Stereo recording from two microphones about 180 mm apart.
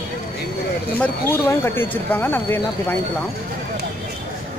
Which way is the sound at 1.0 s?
10° left (ahead or behind).